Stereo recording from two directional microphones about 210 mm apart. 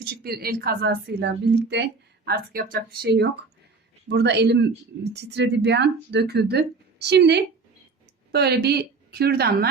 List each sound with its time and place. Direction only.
0.0 s a woman's voice: 45° right (ahead or behind)